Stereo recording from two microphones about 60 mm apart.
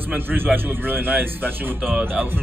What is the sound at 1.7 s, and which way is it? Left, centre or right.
Speech, right.